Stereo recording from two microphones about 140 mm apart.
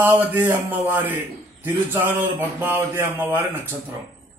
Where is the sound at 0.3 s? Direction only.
10° right (ahead or behind).